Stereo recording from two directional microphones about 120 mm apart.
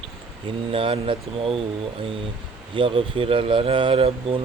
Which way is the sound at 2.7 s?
50° right (ahead or behind).